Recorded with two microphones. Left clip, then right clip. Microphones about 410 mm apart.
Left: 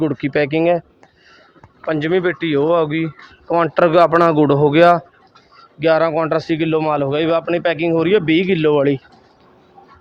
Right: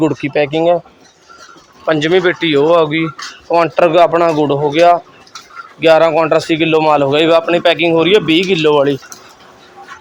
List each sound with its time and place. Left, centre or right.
0.0 s speech: left
1.8 s speech: left